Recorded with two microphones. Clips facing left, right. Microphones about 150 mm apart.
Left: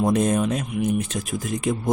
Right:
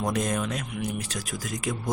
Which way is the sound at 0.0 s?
25° left (ahead or behind).